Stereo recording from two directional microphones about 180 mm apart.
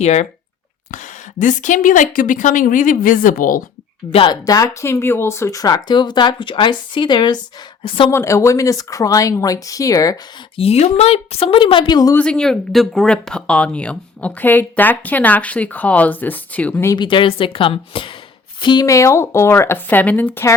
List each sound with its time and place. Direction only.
0.0 s speech: 40° left (ahead or behind)
4.1 s speech: 25° left (ahead or behind)
8.1 s speech: 15° left (ahead or behind)
10.6 s speech: 35° left (ahead or behind)
12.1 s speech: 5° left (ahead or behind)
16.9 s speech: 25° left (ahead or behind)